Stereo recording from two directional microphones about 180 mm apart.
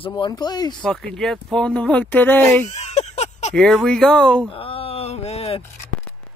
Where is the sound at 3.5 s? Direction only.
Centre (ahead or behind).